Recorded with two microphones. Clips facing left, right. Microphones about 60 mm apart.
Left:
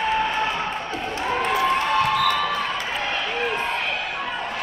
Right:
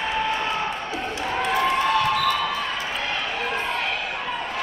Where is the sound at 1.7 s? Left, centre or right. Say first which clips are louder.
Even; left.